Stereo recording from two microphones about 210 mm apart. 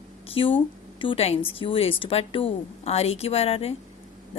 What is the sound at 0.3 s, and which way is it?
A woman's voice, 25° left (ahead or behind).